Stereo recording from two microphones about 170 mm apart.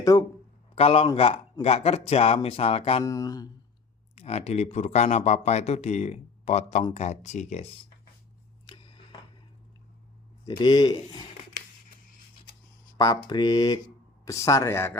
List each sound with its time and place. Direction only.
0.0 s speech: 20° left (ahead or behind)
0.8 s speech: 35° left (ahead or behind)
3.0 s speech: 20° left (ahead or behind)
4.1 s speech: 40° left (ahead or behind)
10.4 s speech: 25° left (ahead or behind)
13.0 s speech: 25° left (ahead or behind)